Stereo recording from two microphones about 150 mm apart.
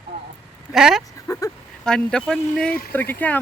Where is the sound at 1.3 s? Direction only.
20° left (ahead or behind).